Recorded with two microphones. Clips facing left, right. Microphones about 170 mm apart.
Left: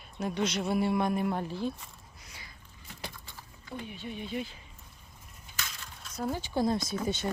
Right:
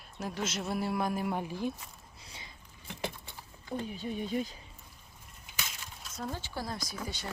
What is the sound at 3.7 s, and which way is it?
Speech, 40° right (ahead or behind).